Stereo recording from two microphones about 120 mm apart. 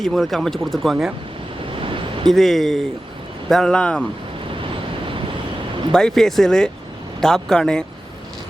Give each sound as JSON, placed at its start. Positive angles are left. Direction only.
{"t": 0.0, "sound": "speech", "side_deg": 0}
{"t": 1.8, "sound": "a sound", "side_deg": -45}
{"t": 2.3, "sound": "speech", "side_deg": 0}
{"t": 5.9, "sound": "speech", "side_deg": 5}